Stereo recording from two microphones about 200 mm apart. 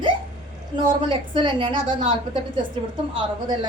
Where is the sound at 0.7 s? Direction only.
25° right (ahead or behind).